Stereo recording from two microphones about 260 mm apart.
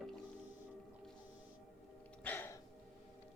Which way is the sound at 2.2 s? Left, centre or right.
Centre.